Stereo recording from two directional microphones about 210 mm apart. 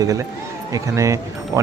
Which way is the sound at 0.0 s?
15° right (ahead or behind).